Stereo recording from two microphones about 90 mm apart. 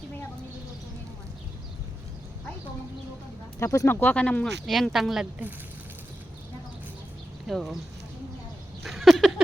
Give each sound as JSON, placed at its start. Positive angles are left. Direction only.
{"t": 3.6, "sound": "speech", "side_deg": 30}
{"t": 4.0, "sound": "speech", "side_deg": 10}
{"t": 4.4, "sound": "speech", "side_deg": 0}
{"t": 7.4, "sound": "speech", "side_deg": -5}
{"t": 8.8, "sound": "a sound", "side_deg": 0}